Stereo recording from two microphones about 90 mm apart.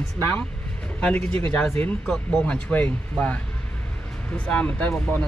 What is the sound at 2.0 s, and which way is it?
Speech, 5° left (ahead or behind).